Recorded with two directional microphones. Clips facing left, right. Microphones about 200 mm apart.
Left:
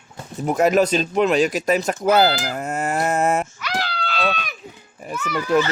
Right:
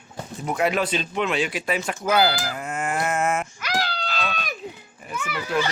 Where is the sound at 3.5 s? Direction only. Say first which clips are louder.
Even; 45° right (ahead or behind).